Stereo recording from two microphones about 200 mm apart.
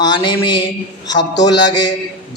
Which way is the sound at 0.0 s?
20° left (ahead or behind).